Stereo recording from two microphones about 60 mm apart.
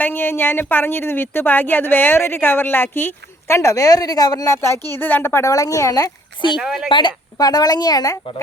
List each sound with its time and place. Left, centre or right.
0.0 s a woman's voice: left
3.5 s speech: left
4.5 s speech: left
5.0 s a woman's voice: left
5.5 s a woman's voice: left
6.6 s a woman's voice: centre
7.3 s a woman's voice: left